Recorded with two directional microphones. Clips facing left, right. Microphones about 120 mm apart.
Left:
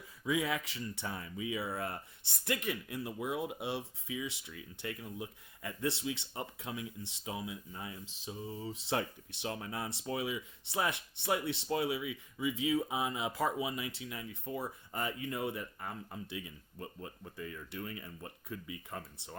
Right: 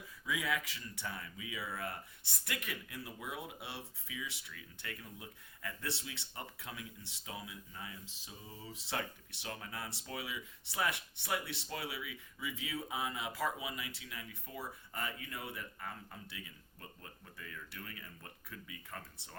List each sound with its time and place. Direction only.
0.3 s speech: 30° left (ahead or behind)